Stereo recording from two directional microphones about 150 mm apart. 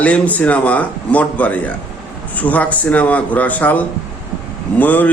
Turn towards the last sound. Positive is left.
turn(degrees=10)  # may be behind; listen again after turning